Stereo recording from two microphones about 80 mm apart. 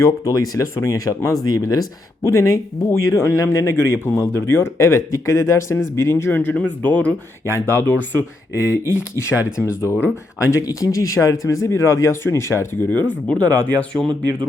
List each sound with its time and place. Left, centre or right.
0.0 s speech: left
12.9 s speech: centre